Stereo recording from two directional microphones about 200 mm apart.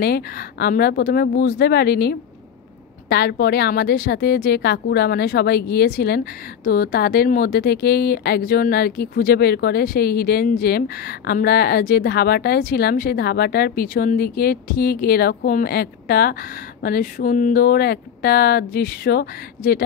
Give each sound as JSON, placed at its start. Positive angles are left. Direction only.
{"t": 0.0, "sound": "a woman's voice", "side_deg": 50}